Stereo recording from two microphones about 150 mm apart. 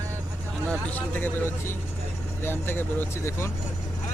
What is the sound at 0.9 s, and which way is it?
Speech, 15° left (ahead or behind).